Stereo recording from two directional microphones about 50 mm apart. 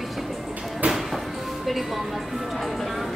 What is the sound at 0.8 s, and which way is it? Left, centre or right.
Music, right.